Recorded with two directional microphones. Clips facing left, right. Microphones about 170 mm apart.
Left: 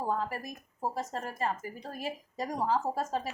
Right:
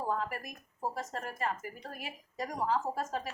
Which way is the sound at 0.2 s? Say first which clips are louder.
Left 2 dB; 30° left (ahead or behind).